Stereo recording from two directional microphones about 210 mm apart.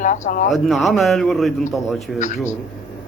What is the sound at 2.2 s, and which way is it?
Speech, 35° left (ahead or behind).